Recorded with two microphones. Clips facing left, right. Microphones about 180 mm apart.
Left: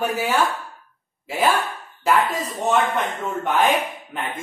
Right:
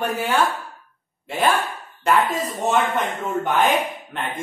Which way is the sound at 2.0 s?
Centre (ahead or behind).